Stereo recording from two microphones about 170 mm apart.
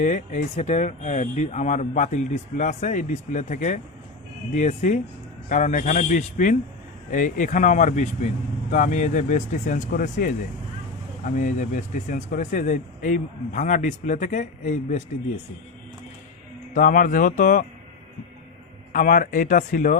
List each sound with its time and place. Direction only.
0.0 s speech: 50° left (ahead or behind)
16.7 s speech: 50° left (ahead or behind)
18.9 s speech: 55° left (ahead or behind)